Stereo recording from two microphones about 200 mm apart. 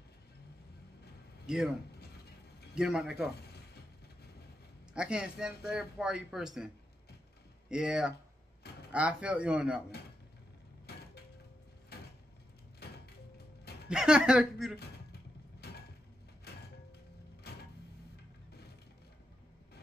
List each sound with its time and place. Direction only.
1.4 s a man's voice: 5° right (ahead or behind)
1.9 s a sound: 55° left (ahead or behind)
2.7 s speech: 5° right (ahead or behind)
3.5 s vehicle: 55° left (ahead or behind)
4.9 s speech: 5° right (ahead or behind)
7.7 s speech: 5° right (ahead or behind)
10.9 s a sound: 55° left (ahead or behind)
12.8 s music: 55° left (ahead or behind)
13.8 s speech: 5° right (ahead or behind)
15.6 s mechanisms: 55° left (ahead or behind)
17.4 s a sound: 55° left (ahead or behind)